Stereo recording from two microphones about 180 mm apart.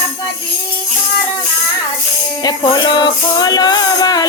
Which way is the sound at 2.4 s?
20° left (ahead or behind).